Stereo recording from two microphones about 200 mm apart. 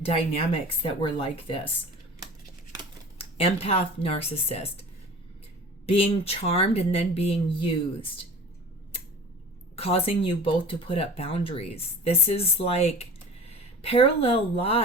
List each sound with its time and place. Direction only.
0.0 s speech: 30° left (ahead or behind)
3.2 s speech: 30° left (ahead or behind)
9.7 s speech: 30° left (ahead or behind)